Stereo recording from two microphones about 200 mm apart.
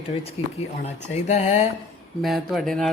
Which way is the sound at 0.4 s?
30° left (ahead or behind).